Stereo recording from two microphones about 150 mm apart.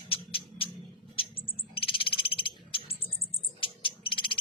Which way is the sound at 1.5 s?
40° left (ahead or behind).